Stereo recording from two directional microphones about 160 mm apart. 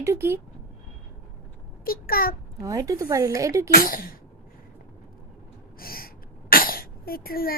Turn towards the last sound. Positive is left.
turn(degrees=65)  # may be behind; listen again after turning